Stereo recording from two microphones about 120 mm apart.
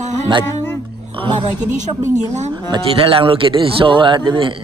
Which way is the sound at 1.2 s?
45° right (ahead or behind).